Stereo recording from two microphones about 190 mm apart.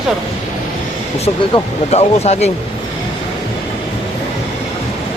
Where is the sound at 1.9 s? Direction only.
35° left (ahead or behind).